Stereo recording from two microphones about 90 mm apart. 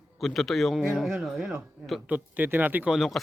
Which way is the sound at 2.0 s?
15° right (ahead or behind).